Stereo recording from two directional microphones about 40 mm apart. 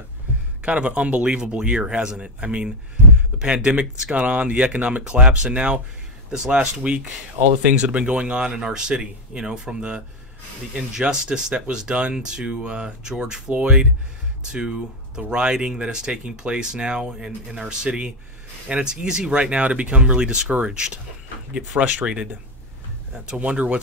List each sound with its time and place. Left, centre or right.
0.7 s speech: right
2.4 s speech: right
3.3 s speech: centre
3.7 s speech: right